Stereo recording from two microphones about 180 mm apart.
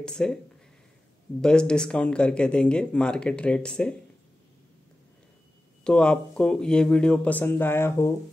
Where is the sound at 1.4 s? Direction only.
5° left (ahead or behind).